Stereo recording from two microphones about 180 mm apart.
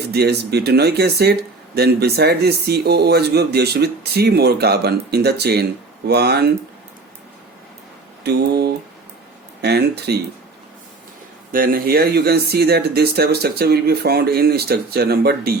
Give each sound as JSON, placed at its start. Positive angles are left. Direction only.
{"t": 0.1, "sound": "speech", "side_deg": -65}
{"t": 8.2, "sound": "speech", "side_deg": -65}
{"t": 11.5, "sound": "speech", "side_deg": -50}